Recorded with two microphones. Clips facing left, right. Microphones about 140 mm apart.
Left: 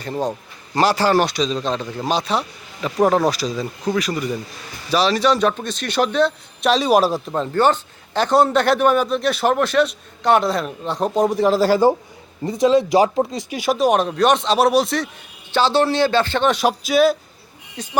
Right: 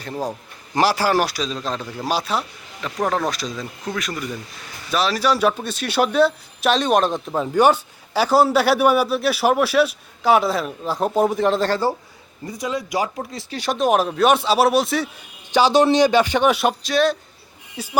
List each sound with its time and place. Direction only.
0.0 s a man's voice: centre (ahead or behind)
2.8 s a man's voice: 5° left (ahead or behind)
7.3 s a man's voice: 10° right (ahead or behind); by 11.8 s 5° left (ahead or behind)
12.5 s speech: 25° left (ahead or behind)
13.3 s a man's voice: 10° left (ahead or behind)
15.5 s speech: 15° right (ahead or behind); by 17.2 s 5° left (ahead or behind)
17.8 s speech: 5° right (ahead or behind)